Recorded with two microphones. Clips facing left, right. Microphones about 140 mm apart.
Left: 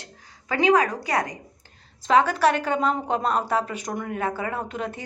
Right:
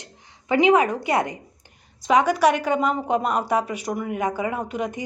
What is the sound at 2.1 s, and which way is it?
A woman's voice, 10° right (ahead or behind).